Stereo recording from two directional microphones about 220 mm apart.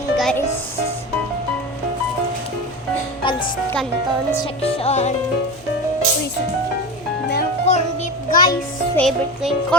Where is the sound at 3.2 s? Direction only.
20° left (ahead or behind).